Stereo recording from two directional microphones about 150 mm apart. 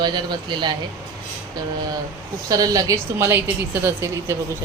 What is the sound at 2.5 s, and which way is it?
Speech, 25° right (ahead or behind).